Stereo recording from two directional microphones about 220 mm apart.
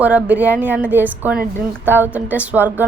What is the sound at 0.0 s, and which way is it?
A woman's voice, 5° right (ahead or behind).